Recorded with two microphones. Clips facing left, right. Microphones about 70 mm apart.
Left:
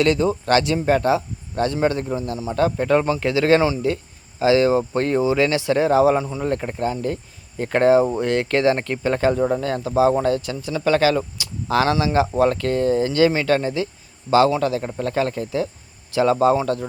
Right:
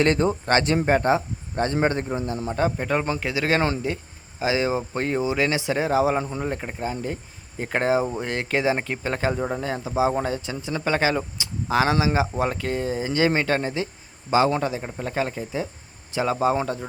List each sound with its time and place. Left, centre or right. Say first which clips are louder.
0.0 s a man's voice: left 2 dB; right; by 16.6 s centre